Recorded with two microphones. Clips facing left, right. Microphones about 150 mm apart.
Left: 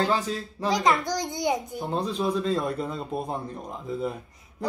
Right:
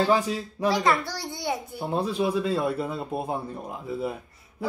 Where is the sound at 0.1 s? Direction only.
10° right (ahead or behind).